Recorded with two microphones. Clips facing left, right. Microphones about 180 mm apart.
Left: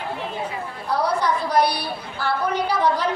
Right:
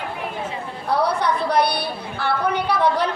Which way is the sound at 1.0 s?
60° right (ahead or behind).